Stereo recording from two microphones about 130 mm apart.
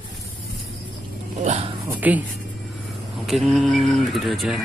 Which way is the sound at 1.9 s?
10° right (ahead or behind).